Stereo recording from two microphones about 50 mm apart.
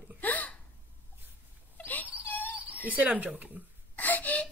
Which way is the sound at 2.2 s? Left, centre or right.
Left.